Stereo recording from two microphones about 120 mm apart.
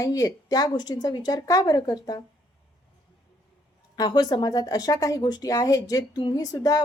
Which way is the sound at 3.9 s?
35° left (ahead or behind).